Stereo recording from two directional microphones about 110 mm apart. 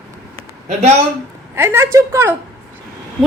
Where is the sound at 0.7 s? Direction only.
90° right.